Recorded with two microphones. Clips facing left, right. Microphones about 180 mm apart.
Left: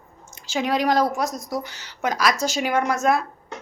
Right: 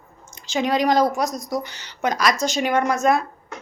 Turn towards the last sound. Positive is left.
turn(degrees=5)  # may be behind; listen again after turning